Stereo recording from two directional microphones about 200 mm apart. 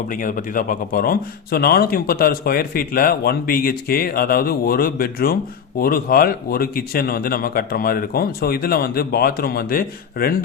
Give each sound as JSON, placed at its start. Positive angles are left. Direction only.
{"t": 0.1, "sound": "speech", "side_deg": 40}